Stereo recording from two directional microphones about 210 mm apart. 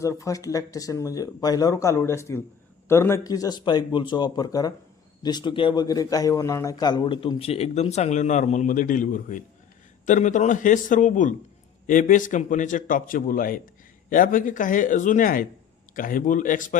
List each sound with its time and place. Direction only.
0.0 s a man's voice: 15° left (ahead or behind); by 16.7 s 40° left (ahead or behind)